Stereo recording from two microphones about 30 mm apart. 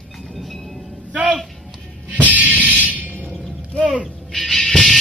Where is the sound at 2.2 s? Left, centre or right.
Right.